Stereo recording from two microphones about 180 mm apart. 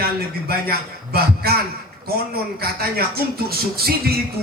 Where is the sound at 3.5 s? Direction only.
60° right (ahead or behind).